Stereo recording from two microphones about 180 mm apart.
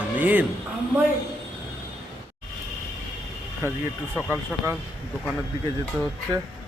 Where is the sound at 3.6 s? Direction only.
15° right (ahead or behind).